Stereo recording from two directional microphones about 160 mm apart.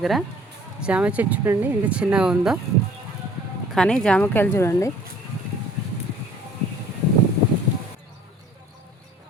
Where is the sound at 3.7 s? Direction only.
5° left (ahead or behind).